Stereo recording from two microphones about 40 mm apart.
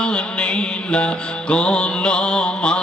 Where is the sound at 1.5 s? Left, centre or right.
Left.